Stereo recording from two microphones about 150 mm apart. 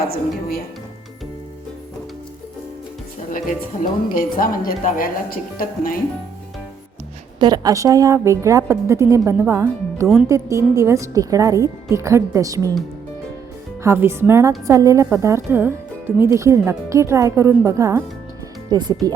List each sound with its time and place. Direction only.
3.2 s speech: 60° left (ahead or behind)
7.3 s speech: 30° right (ahead or behind)
13.8 s speech: 15° right (ahead or behind)